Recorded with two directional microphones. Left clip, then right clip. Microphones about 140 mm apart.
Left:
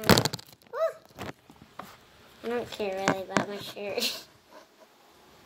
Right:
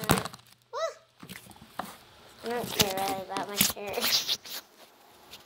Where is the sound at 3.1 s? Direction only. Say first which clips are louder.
Left 5 dB; 65° left (ahead or behind).